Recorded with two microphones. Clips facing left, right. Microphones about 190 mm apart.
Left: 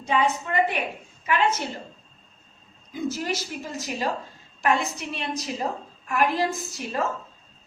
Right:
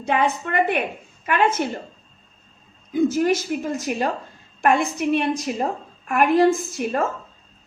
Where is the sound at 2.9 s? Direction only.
55° right (ahead or behind).